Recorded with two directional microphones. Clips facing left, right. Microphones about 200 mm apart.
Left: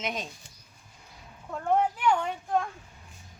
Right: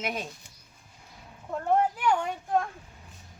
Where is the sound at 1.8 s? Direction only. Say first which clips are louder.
Even; 5° right (ahead or behind).